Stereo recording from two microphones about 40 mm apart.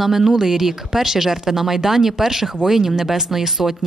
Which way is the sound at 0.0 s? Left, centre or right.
Centre.